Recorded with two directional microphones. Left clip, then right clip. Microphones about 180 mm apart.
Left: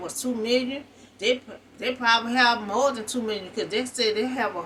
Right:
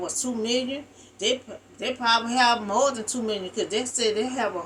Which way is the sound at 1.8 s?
15° right (ahead or behind).